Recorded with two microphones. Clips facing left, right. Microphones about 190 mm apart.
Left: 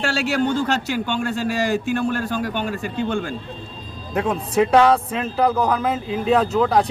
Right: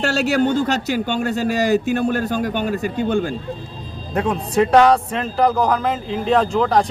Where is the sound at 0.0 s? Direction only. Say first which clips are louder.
Right 3 dB; 40° right (ahead or behind).